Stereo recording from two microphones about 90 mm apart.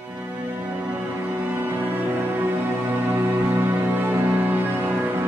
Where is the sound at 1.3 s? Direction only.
25° right (ahead or behind).